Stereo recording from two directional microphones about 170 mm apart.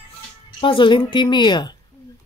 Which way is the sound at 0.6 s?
30° left (ahead or behind).